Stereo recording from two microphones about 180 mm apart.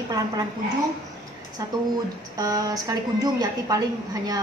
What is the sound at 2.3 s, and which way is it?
A woman's voice, 20° right (ahead or behind).